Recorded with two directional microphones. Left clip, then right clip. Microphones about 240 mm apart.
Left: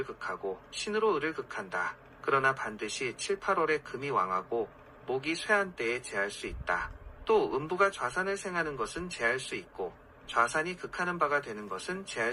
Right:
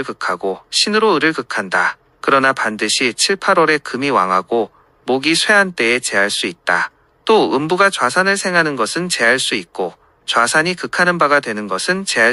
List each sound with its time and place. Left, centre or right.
0.0 s speech: right